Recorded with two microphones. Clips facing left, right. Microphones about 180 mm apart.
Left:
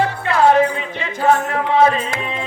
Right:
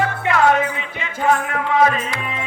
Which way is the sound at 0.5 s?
35° left (ahead or behind).